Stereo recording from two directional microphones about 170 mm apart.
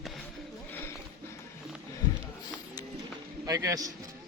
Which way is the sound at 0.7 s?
15° left (ahead or behind).